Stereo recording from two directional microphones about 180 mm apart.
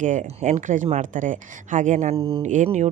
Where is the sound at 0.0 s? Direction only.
45° right (ahead or behind).